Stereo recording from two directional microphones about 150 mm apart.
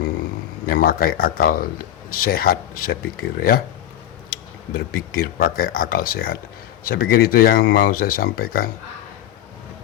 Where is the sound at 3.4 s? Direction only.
90° left.